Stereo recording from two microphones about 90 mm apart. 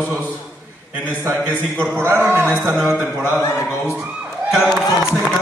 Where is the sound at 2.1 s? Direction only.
15° right (ahead or behind).